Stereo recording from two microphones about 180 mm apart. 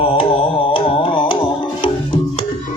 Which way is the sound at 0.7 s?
25° left (ahead or behind).